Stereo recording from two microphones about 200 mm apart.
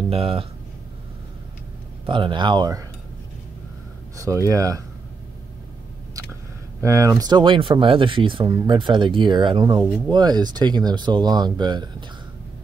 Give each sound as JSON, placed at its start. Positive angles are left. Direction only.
{"t": 0.1, "sound": "speech", "side_deg": -30}
{"t": 2.0, "sound": "speech", "side_deg": -25}
{"t": 4.2, "sound": "speech", "side_deg": -15}
{"t": 6.8, "sound": "speech", "side_deg": -15}
{"t": 9.8, "sound": "speech", "side_deg": 5}
{"t": 10.1, "sound": "speech", "side_deg": -20}